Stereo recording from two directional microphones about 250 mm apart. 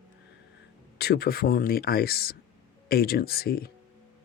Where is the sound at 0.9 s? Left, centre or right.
Left.